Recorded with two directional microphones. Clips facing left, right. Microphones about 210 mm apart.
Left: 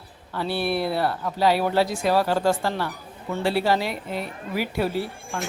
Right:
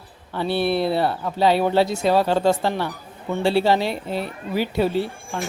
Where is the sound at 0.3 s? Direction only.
25° right (ahead or behind).